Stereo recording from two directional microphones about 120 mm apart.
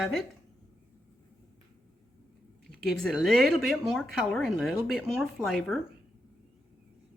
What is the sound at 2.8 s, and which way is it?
A woman's voice, centre (ahead or behind).